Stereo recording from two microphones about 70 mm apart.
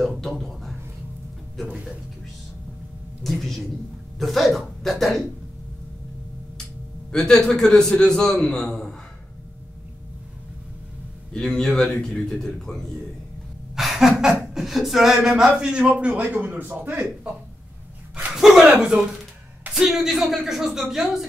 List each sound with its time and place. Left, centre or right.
0.0 s a sound: centre
3.3 s beatboxing: centre
4.2 s speech: centre
7.1 s a man's voice: centre
11.3 s a man's voice: centre
13.7 s a sound: centre
14.4 s beatboxing: centre
15.6 s a man's voice: centre; by 17.0 s right
18.3 s speech: centre
19.7 s beatboxing: centre